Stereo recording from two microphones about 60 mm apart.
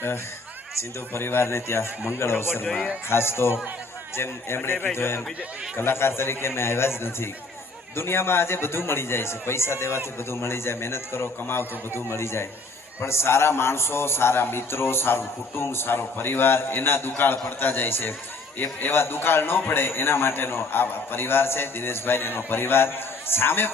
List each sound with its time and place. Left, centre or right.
0.8 s a man's voice: left